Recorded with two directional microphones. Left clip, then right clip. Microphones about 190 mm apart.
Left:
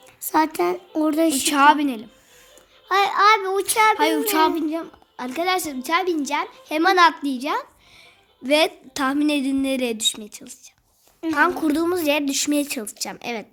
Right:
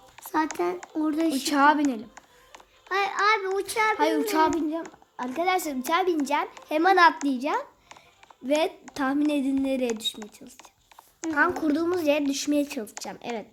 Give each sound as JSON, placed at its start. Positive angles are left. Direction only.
{"t": 0.3, "sound": "speech", "side_deg": 35}
{"t": 1.5, "sound": "a woman's voice", "side_deg": 0}
{"t": 2.9, "sound": "speech", "side_deg": 40}
{"t": 3.9, "sound": "a woman's voice", "side_deg": 0}
{"t": 4.6, "sound": "a woman's voice", "side_deg": 15}
{"t": 8.4, "sound": "a woman's voice", "side_deg": 15}